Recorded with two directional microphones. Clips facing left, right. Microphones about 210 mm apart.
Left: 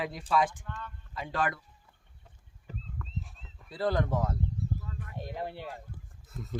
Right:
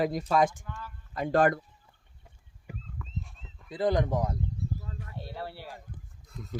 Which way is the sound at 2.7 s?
15° right (ahead or behind).